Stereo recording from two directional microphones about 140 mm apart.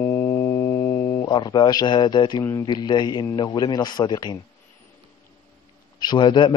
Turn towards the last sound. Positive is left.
turn(degrees=35)  # may be behind; listen again after turning